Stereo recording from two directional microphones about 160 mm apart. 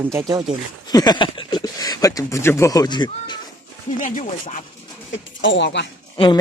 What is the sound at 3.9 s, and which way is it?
Speech, 55° left (ahead or behind).